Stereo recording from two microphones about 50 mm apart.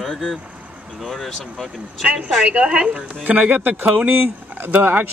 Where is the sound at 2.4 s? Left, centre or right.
Right.